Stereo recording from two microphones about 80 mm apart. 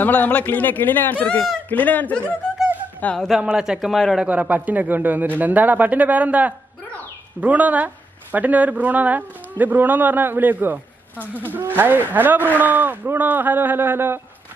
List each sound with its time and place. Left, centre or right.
0.0 s a man's voice: left
3.3 s a man's voice: centre
4.3 s speech: centre